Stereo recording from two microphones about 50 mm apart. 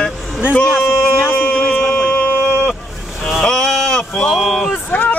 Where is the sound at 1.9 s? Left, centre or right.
Left.